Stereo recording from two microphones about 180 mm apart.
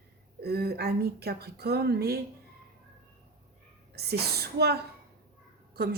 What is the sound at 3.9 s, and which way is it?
Speech, 60° right (ahead or behind).